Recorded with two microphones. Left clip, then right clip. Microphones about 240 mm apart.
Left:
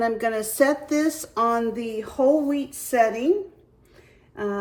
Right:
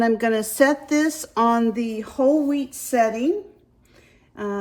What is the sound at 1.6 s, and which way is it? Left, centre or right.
Speech, right.